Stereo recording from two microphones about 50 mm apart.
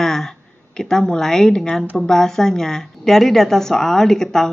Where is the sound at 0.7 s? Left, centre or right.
Centre.